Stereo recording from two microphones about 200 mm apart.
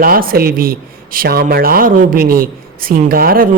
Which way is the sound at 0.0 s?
45° right (ahead or behind).